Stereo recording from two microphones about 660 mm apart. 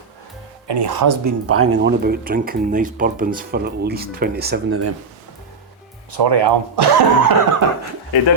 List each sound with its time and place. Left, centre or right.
0.7 s speech: right; by 4.9 s centre
6.1 s speech: right